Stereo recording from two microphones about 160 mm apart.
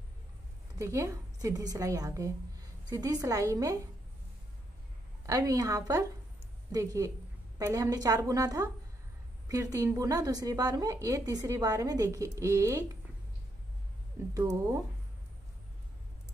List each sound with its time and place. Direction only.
0.7 s a woman's voice: 20° right (ahead or behind)
5.2 s a woman's voice: 20° right (ahead or behind)